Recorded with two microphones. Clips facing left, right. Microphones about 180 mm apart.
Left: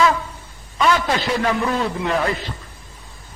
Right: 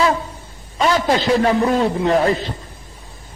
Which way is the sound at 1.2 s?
30° right (ahead or behind).